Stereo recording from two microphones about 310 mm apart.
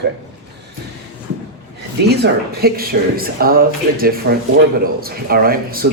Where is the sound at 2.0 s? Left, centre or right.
Right.